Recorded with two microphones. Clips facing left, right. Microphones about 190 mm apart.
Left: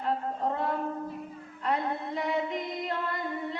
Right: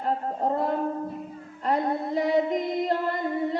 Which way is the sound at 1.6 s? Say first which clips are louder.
Right 5 dB; 35° right (ahead or behind).